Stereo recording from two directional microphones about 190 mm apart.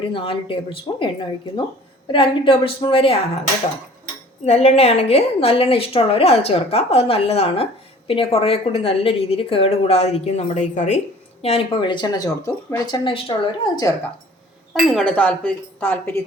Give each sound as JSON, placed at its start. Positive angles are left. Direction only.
{"t": 0.1, "sound": "speech", "side_deg": 30}
{"t": 4.4, "sound": "a woman's voice", "side_deg": 35}
{"t": 14.7, "sound": "speech", "side_deg": 5}